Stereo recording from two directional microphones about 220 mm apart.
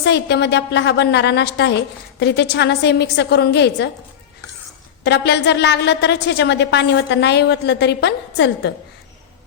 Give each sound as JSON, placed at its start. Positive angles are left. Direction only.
{"t": 0.0, "sound": "a woman's voice", "side_deg": 50}
{"t": 5.0, "sound": "a woman's voice", "side_deg": 50}